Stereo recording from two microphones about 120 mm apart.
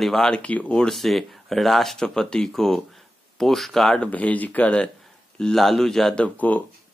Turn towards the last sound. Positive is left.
turn(degrees=15)  # may be behind; listen again after turning